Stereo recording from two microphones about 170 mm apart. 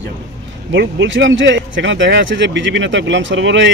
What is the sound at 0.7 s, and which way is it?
A man's voice, 90° right.